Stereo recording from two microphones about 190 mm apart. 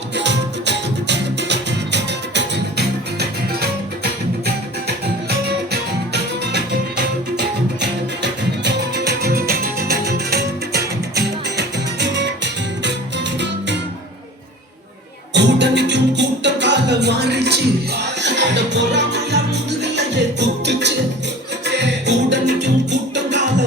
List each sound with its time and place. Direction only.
0.2 s music: 65° right (ahead or behind)
6.5 s music: 60° right (ahead or behind)
15.3 s music: 65° right (ahead or behind)